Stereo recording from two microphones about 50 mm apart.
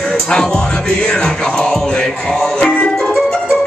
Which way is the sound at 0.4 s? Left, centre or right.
Centre.